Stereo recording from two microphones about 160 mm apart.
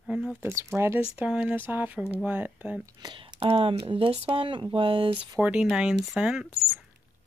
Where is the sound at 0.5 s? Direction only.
15° right (ahead or behind).